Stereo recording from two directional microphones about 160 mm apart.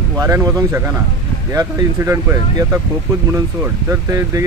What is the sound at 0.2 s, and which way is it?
Speech, 20° right (ahead or behind).